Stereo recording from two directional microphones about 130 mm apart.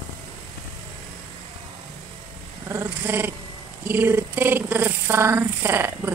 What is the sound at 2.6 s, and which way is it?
Dog, 20° right (ahead or behind).